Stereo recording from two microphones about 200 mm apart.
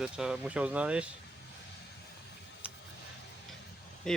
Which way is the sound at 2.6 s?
5° right (ahead or behind).